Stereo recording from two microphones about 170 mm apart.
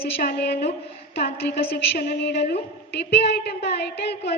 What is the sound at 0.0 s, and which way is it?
A woman's voice, 65° left (ahead or behind).